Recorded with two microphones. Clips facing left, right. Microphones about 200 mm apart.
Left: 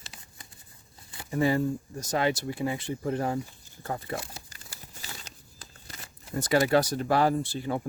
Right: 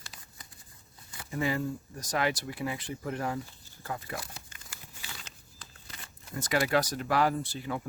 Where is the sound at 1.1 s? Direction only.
35° left (ahead or behind).